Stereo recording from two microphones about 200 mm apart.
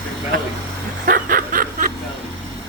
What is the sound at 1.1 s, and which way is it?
Snicker, 45° right (ahead or behind).